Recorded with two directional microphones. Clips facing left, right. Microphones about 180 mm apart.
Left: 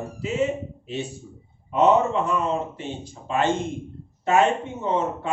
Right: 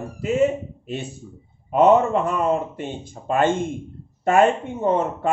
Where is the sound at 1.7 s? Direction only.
50° right (ahead or behind).